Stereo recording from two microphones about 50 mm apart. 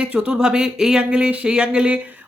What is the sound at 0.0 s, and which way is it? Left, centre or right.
Speech, right.